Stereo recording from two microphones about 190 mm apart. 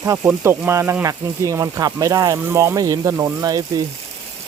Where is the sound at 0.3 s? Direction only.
10° right (ahead or behind).